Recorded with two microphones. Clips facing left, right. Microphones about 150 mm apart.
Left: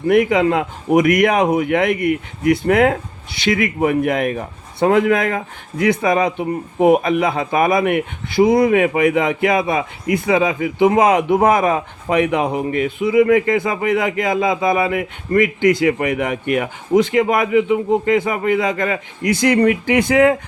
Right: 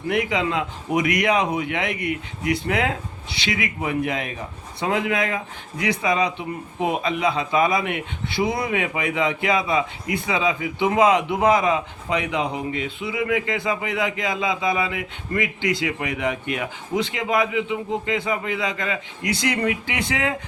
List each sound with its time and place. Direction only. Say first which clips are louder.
0.1 s a man's voice: left 9 dB; 50° left (ahead or behind)